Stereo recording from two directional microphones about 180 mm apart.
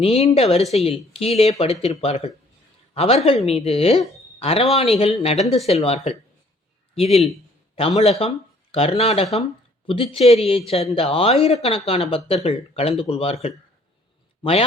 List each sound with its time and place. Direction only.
0.0 s a man's voice: 35° left (ahead or behind)